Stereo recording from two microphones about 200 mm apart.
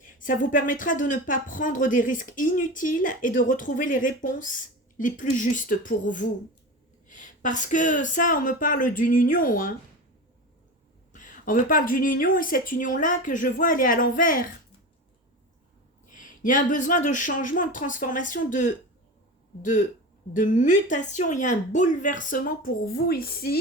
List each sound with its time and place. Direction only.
0.0 s speech: 40° left (ahead or behind)
11.1 s a woman's voice: 40° left (ahead or behind)
16.1 s speech: 40° left (ahead or behind)
20.3 s speech: 40° left (ahead or behind)